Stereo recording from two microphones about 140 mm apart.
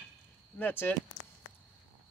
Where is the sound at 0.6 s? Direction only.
15° left (ahead or behind).